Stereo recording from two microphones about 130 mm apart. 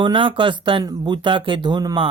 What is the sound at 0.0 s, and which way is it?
Speech, 40° right (ahead or behind).